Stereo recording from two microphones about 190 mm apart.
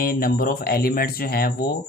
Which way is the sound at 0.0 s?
50° left (ahead or behind).